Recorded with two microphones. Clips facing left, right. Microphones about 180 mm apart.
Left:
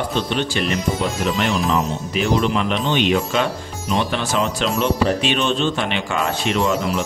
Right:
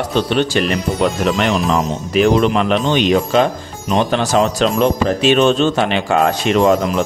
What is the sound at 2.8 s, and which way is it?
Speech, 40° right (ahead or behind).